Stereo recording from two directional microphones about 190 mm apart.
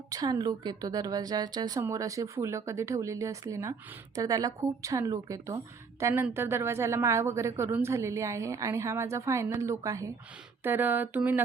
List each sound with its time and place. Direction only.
0.1 s a woman's voice: 20° right (ahead or behind)